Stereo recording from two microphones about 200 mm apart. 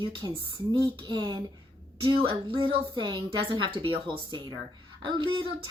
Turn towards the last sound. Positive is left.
turn(degrees=-25)  # may be behind; listen again after turning